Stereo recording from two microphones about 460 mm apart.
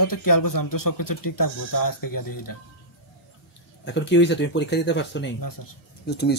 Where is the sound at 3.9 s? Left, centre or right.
Left.